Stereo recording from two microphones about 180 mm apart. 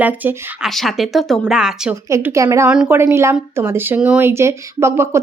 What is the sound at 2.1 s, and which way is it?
Speech, 15° right (ahead or behind).